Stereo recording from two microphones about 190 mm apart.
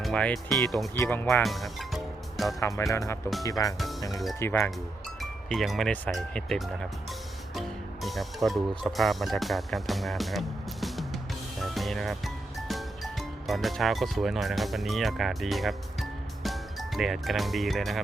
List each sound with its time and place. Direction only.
0.0 s speech: 5° left (ahead or behind)
0.9 s speech: 10° left (ahead or behind)
2.6 s speech: 15° left (ahead or behind)
5.2 s speech: centre (ahead or behind)
8.0 s speech: centre (ahead or behind)